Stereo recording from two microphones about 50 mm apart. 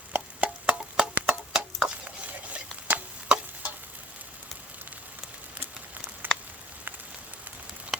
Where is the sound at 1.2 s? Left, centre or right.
Centre.